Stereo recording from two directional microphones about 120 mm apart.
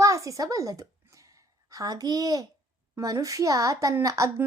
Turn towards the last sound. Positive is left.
turn(degrees=-30)  # may be behind; listen again after turning